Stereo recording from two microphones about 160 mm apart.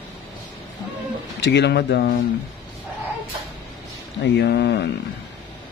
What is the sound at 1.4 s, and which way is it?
Speech, 90° left.